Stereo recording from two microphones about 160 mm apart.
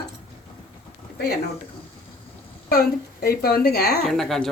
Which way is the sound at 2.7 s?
70° left (ahead or behind).